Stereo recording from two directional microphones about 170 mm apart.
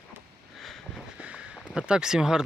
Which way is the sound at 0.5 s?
Centre (ahead or behind).